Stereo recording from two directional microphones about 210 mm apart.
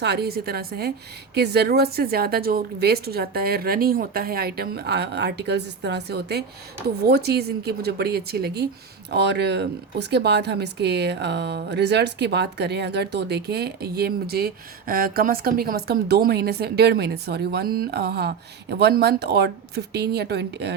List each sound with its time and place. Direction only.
0.0 s speech: 50° right (ahead or behind)